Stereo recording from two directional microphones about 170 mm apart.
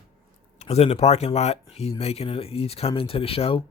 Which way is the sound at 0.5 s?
40° left (ahead or behind).